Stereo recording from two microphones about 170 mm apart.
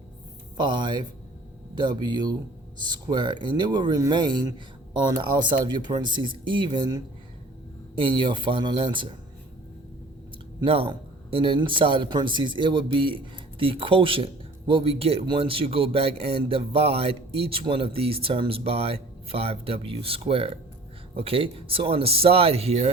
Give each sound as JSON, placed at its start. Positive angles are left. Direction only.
{"t": 0.5, "sound": "speech", "side_deg": -25}
{"t": 10.6, "sound": "speech", "side_deg": -30}